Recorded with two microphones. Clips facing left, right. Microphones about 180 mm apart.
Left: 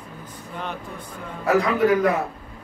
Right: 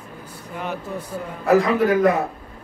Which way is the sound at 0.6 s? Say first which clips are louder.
Right 4 dB; 5° right (ahead or behind).